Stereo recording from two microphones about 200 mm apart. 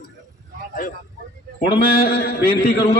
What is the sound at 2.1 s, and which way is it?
Speech, 50° left (ahead or behind).